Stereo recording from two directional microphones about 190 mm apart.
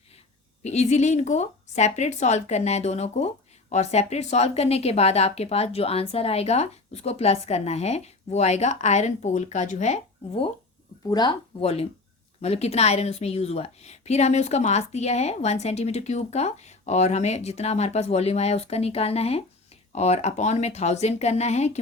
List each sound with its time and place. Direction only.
0.6 s speech: 35° left (ahead or behind)